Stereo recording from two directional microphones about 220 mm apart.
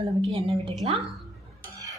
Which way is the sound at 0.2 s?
25° right (ahead or behind).